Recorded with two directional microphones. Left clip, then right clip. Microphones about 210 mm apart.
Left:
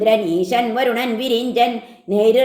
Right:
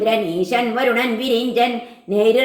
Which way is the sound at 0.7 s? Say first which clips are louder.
Right 1 dB; 35° left (ahead or behind).